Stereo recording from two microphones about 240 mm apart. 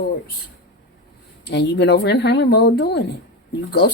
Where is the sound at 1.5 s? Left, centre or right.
Left.